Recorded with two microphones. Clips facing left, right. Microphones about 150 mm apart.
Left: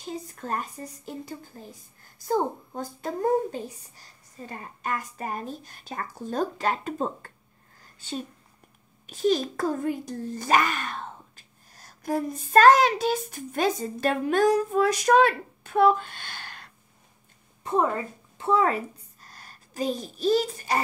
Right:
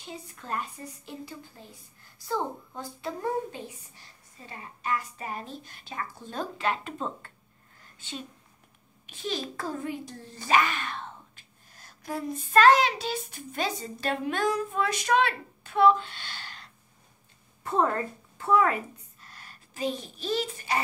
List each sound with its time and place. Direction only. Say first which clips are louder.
0.0 s speech: left 7 dB; 40° left (ahead or behind)
9.0 s a child's voice: left 10 dB; 45° left (ahead or behind)
17.6 s a woman's voice: left 1 dB; 10° left (ahead or behind)
18.4 s a woman's voice: left 1 dB; 30° left (ahead or behind)
19.2 s a child's voice: left 2 dB; 40° left (ahead or behind)